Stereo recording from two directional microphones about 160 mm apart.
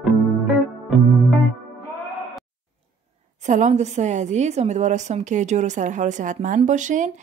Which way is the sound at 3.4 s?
50° right (ahead or behind).